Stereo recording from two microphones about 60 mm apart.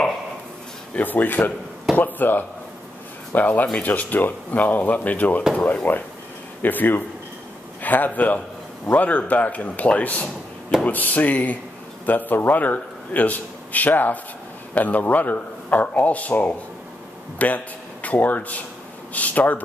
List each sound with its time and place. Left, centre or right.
0.9 s a man's voice: left
5.5 s speech: centre
6.6 s a man's voice: left